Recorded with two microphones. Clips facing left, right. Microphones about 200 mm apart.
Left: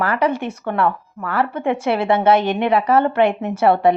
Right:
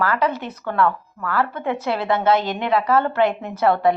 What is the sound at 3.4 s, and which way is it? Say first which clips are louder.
Speech: left 5 dB; 25° left (ahead or behind).